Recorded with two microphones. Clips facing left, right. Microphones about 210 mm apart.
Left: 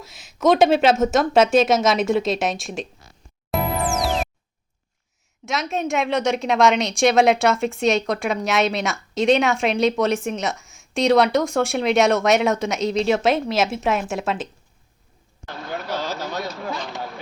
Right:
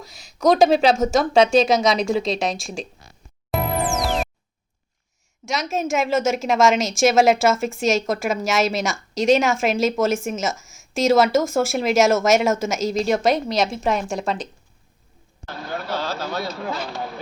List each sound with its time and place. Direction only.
0.0 s a woman's voice: centre (ahead or behind)
3.5 s music: centre (ahead or behind)
5.5 s a woman's voice: centre (ahead or behind)
15.4 s speech: 15° left (ahead or behind)
16.6 s a woman's voice: 5° right (ahead or behind)